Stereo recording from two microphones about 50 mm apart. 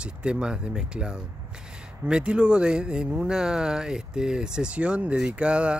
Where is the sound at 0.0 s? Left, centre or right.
Right.